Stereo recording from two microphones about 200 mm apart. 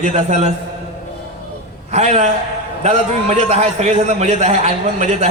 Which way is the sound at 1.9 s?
35° right (ahead or behind).